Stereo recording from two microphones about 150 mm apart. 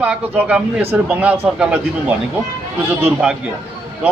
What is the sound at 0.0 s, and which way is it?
A man's voice, 10° right (ahead or behind).